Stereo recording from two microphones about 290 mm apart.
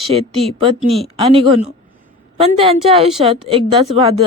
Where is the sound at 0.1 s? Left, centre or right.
Right.